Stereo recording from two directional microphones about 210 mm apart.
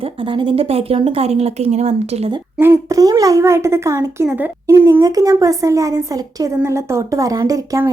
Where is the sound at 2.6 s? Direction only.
15° right (ahead or behind).